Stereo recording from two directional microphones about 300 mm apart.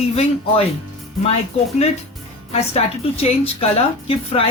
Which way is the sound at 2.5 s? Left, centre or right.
Centre.